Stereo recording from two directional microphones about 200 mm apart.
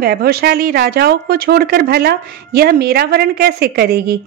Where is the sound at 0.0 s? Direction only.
50° right (ahead or behind).